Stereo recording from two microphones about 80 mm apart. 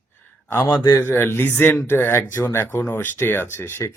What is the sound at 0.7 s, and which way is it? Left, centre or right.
Speech, left.